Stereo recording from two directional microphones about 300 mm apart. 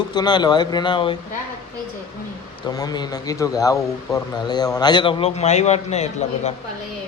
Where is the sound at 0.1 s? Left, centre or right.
Centre.